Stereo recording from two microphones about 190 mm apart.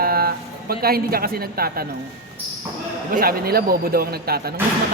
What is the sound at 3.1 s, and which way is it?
Speech, 50° right (ahead or behind).